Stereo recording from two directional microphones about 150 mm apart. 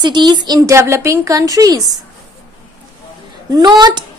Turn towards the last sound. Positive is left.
turn(degrees=-30)  # may be behind; listen again after turning